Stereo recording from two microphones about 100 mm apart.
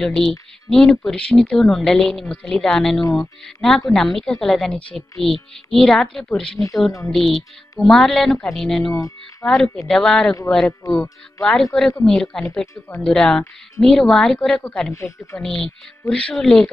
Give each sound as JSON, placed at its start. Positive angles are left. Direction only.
{"t": 0.0, "sound": "speech", "side_deg": 5}
{"t": 8.9, "sound": "speech", "side_deg": 25}
{"t": 9.5, "sound": "speech", "side_deg": 0}
{"t": 10.8, "sound": "speech", "side_deg": 35}
{"t": 11.4, "sound": "speech", "side_deg": 5}
{"t": 15.0, "sound": "speech", "side_deg": 30}
{"t": 15.3, "sound": "speech", "side_deg": 10}